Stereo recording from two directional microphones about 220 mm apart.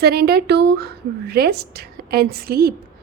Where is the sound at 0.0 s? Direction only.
45° right (ahead or behind).